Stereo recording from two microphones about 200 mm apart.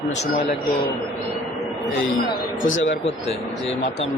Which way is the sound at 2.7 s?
75° left (ahead or behind).